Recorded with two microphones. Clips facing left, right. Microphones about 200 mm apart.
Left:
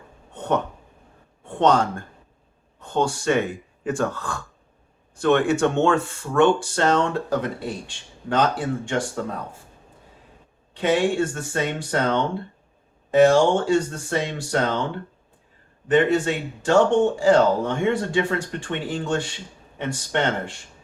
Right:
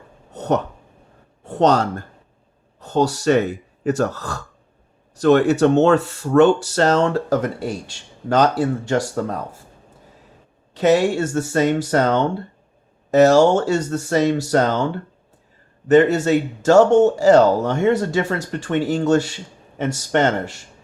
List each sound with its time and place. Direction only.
0.3 s speech: 40° right (ahead or behind)
10.8 s speech: 40° right (ahead or behind)
15.9 s speech: 40° right (ahead or behind)